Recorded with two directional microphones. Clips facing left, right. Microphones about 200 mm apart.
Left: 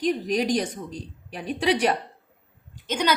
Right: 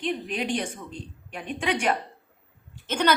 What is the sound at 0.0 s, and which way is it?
A woman's voice, 40° left (ahead or behind).